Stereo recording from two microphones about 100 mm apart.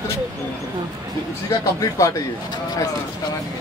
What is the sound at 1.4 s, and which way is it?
Speech, 35° left (ahead or behind).